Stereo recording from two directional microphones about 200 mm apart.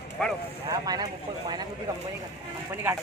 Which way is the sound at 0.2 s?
5° left (ahead or behind).